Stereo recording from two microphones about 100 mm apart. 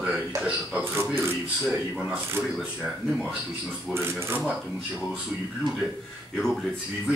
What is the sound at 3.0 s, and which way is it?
Speech, 10° left (ahead or behind).